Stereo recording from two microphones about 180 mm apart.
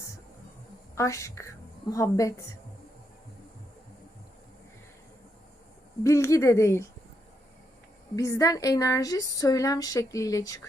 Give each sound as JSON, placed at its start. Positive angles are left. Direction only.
{"t": 0.9, "sound": "speech", "side_deg": 15}
{"t": 6.0, "sound": "speech", "side_deg": 15}
{"t": 8.1, "sound": "speech", "side_deg": 15}